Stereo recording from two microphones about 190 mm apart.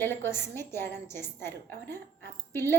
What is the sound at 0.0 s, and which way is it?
A woman's voice, 10° left (ahead or behind).